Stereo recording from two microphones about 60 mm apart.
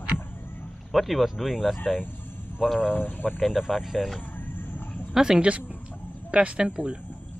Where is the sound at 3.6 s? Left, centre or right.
Centre.